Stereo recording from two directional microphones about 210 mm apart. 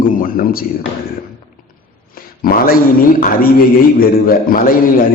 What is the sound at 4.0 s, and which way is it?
Speech, 45° left (ahead or behind).